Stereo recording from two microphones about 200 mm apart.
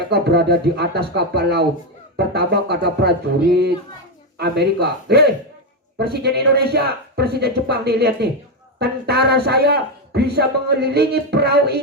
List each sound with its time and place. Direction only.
0.1 s speech: 55° right (ahead or behind)